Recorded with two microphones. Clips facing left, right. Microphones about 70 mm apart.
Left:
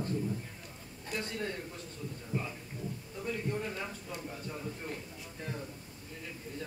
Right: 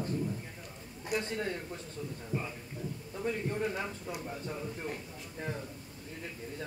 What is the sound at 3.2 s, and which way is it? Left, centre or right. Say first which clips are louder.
Speech: right 3 dB; right.